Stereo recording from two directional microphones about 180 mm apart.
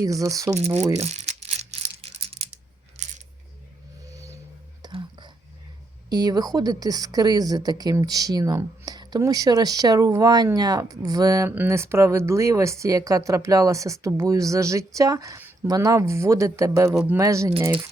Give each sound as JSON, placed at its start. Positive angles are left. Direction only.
{"t": 0.0, "sound": "speech", "side_deg": -20}
{"t": 0.6, "sound": "speech", "side_deg": -35}
{"t": 1.0, "sound": "rattle", "side_deg": -35}
{"t": 3.0, "sound": "a sound", "side_deg": -40}
{"t": 4.1, "sound": "a sound", "side_deg": -15}
{"t": 4.8, "sound": "whispering", "side_deg": -25}
{"t": 6.1, "sound": "speech", "side_deg": -20}
{"t": 16.9, "sound": "speech", "side_deg": -5}
{"t": 17.2, "sound": "speech", "side_deg": -15}